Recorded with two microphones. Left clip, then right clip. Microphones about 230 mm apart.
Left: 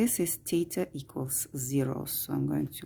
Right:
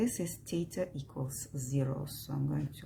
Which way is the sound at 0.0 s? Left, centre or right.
Left.